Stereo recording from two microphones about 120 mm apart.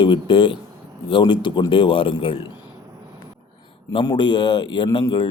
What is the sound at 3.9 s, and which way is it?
A man's voice, 40° left (ahead or behind).